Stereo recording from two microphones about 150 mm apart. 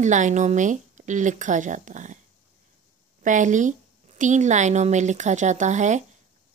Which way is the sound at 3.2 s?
55° right (ahead or behind).